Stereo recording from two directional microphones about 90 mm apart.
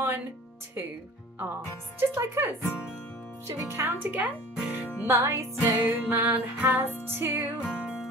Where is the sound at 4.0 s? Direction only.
15° right (ahead or behind).